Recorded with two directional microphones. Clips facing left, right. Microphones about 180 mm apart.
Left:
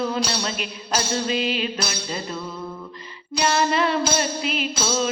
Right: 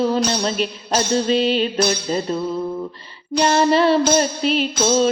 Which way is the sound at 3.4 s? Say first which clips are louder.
Right 6 dB; 30° right (ahead or behind).